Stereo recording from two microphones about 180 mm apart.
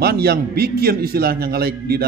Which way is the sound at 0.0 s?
60° right (ahead or behind).